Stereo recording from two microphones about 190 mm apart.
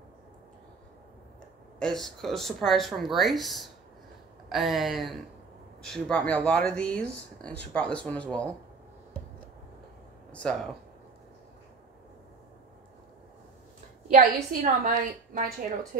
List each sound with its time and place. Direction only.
1.8 s speech: centre (ahead or behind)
10.3 s speech: 5° left (ahead or behind)
14.0 s a woman's voice: 40° right (ahead or behind)